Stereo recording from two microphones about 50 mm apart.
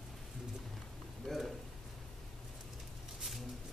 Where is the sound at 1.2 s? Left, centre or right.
Centre.